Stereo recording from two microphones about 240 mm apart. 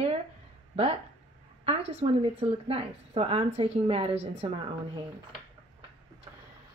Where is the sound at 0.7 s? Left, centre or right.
Right.